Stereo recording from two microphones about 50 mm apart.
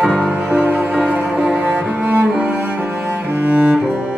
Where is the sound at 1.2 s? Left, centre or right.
Centre.